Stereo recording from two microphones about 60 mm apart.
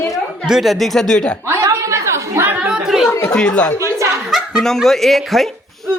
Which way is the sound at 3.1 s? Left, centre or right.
Left.